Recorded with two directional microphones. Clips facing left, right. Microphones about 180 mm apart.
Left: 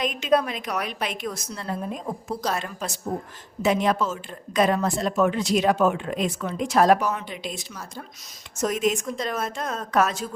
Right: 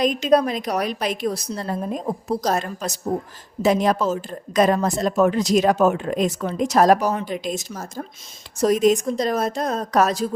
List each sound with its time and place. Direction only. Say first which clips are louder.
0.0 s a woman's voice: right 5 dB; 35° right (ahead or behind)